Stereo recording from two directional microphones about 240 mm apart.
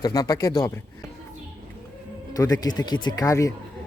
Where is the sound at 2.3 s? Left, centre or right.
Centre.